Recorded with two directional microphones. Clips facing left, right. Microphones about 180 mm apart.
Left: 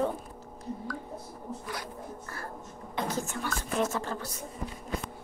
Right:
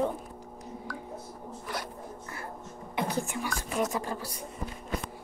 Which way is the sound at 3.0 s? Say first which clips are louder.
Right 1 dB; 15° right (ahead or behind).